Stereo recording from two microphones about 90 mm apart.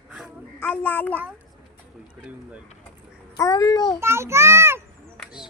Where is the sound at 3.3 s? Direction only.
40° left (ahead or behind).